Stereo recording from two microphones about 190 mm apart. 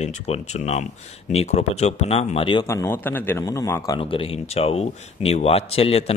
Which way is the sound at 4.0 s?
30° left (ahead or behind).